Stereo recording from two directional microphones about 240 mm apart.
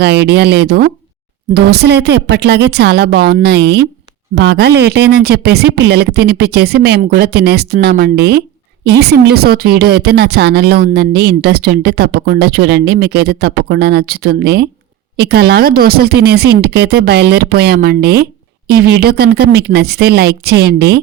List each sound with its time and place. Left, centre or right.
0.0 s a woman's voice: right